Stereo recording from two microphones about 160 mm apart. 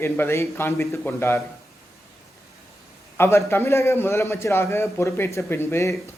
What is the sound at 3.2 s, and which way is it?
Speech, 15° left (ahead or behind).